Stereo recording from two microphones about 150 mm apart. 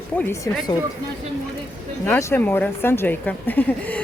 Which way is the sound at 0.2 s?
15° left (ahead or behind).